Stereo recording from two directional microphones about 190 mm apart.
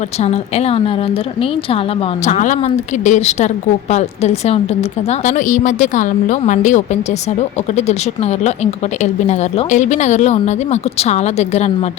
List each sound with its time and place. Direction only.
0.2 s a woman's voice: 35° left (ahead or behind)